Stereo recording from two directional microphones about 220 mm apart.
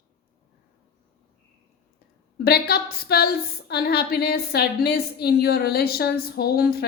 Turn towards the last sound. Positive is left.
turn(degrees=45)  # may be behind; listen again after turning